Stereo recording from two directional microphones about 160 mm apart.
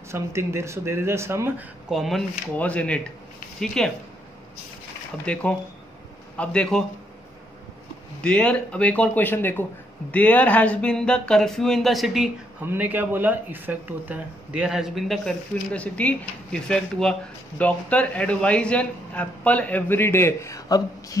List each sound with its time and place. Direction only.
0.1 s speech: 15° right (ahead or behind)
1.9 s speech: centre (ahead or behind)
5.2 s speech: 5° left (ahead or behind)
8.2 s speech: 5° left (ahead or behind)
12.6 s speech: 10° right (ahead or behind); by 21.2 s 20° left (ahead or behind)